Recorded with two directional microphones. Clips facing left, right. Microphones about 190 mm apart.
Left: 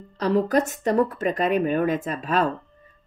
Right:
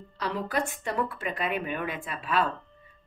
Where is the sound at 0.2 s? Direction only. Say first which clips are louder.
Left 9 dB; 40° left (ahead or behind).